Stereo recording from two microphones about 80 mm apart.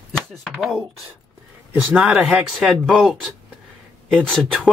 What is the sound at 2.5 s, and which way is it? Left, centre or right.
Speech, centre.